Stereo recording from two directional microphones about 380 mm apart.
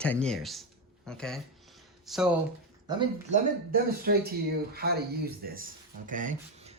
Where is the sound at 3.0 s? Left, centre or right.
Centre.